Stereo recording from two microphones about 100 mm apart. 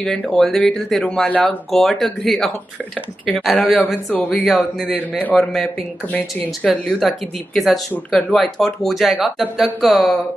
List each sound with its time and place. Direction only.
0.0 s speech: 5° left (ahead or behind)
1.7 s speech: centre (ahead or behind)
3.8 s speech: 20° left (ahead or behind)
4.3 s speech: 5° left (ahead or behind)
6.7 s speech: centre (ahead or behind)